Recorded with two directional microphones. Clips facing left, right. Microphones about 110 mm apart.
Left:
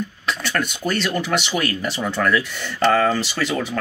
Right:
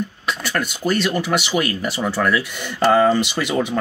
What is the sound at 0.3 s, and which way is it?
Speech, 10° right (ahead or behind).